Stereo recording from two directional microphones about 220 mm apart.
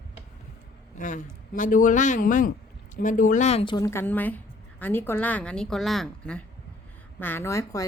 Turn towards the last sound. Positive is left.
turn(degrees=15)  # may be behind; listen again after turning